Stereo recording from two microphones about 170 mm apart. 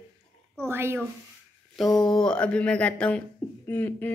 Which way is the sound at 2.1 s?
5° left (ahead or behind).